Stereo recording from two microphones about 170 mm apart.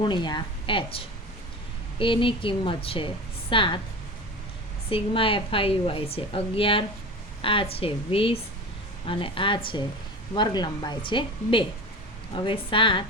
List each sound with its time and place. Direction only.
0.0 s a woman's voice: 25° left (ahead or behind)
4.9 s a woman's voice: 30° left (ahead or behind)